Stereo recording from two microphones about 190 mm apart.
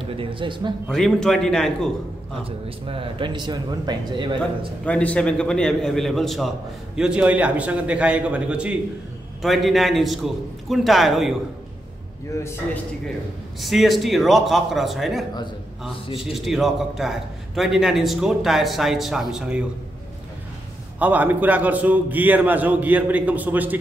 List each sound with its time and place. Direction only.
0.1 s speech: 25° right (ahead or behind)
0.8 s a man's voice: 5° left (ahead or behind)
2.9 s speech: 25° right (ahead or behind)
4.4 s a man's voice: 5° left (ahead or behind)
13.6 s a man's voice: centre (ahead or behind)
16.3 s a man's voice: centre (ahead or behind)
21.0 s a man's voice: 10° right (ahead or behind)